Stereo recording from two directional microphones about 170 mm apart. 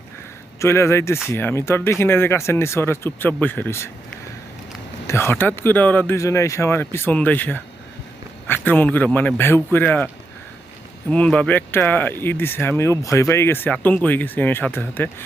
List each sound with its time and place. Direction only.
0.6 s speech: 15° left (ahead or behind)
5.0 s speech: 15° left (ahead or behind)
11.1 s speech: 5° left (ahead or behind)